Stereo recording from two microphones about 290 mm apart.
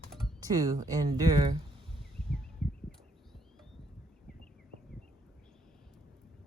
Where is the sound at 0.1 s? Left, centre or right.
Centre.